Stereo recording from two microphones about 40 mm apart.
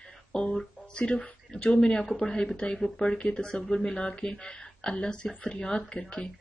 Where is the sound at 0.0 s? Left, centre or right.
Left.